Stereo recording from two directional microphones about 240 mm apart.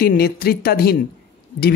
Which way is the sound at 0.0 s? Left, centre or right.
Left.